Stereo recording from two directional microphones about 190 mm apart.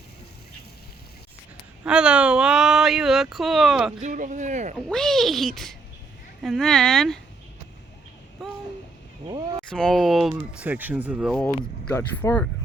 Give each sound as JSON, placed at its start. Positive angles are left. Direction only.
{"t": 1.8, "sound": "speech", "side_deg": -5}
{"t": 4.0, "sound": "speech", "side_deg": -40}
{"t": 4.9, "sound": "speech", "side_deg": 0}
{"t": 9.3, "sound": "speech", "side_deg": -20}
{"t": 9.6, "sound": "speech", "side_deg": 0}
{"t": 11.4, "sound": "speech", "side_deg": 10}